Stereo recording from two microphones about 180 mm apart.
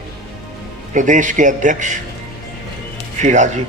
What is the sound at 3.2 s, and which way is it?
Speech, 40° right (ahead or behind).